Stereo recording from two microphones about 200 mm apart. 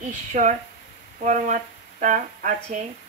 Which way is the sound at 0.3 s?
35° right (ahead or behind).